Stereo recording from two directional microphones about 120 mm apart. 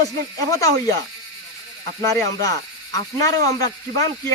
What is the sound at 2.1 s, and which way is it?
Speech, 30° left (ahead or behind).